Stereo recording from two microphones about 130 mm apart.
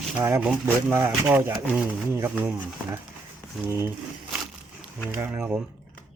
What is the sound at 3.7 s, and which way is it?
Speech, 20° right (ahead or behind).